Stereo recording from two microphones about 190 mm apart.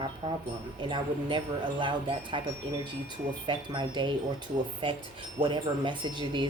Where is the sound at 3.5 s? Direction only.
25° right (ahead or behind).